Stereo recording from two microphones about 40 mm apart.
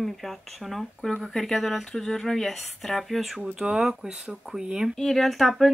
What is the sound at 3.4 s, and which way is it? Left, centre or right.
Speech, centre.